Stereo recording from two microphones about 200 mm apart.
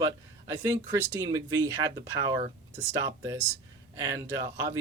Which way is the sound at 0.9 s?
15° right (ahead or behind).